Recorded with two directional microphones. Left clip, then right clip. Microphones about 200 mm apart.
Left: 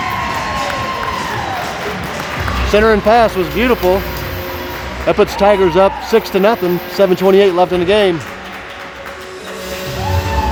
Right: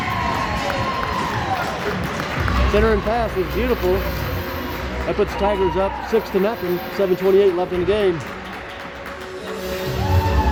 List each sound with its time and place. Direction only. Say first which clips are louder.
2.6 s speech: left 9 dB; 40° left (ahead or behind)
5.0 s speech: left 9 dB; 45° left (ahead or behind)